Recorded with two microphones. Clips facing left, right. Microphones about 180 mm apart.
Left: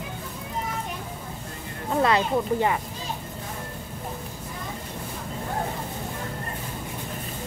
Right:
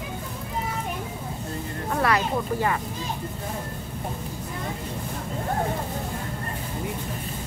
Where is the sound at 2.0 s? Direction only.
20° left (ahead or behind).